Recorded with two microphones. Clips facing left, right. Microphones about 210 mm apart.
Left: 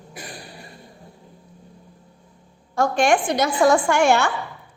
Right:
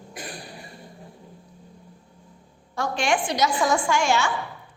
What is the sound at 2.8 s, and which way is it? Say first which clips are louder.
A woman's voice: left 6 dB; 50° left (ahead or behind).